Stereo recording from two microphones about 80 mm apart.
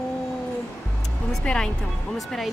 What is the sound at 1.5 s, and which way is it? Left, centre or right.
Speech, centre.